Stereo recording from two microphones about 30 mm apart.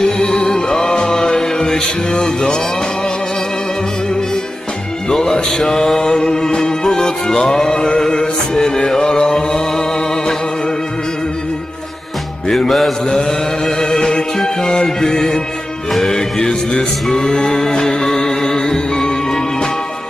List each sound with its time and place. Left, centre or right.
0.2 s music: left
5.5 s music: left
12.5 s music: centre
13.1 s a sound: centre
16.0 s music: centre